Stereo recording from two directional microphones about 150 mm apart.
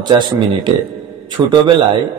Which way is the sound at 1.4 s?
25° right (ahead or behind).